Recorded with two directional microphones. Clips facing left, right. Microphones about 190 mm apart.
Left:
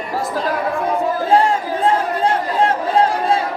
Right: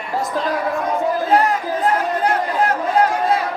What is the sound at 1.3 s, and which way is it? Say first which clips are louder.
Chatter: left 3 dB; 30° left (ahead or behind).